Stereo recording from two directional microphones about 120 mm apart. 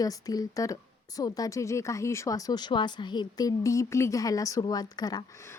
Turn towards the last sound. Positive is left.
turn(degrees=35)  # may be behind; listen again after turning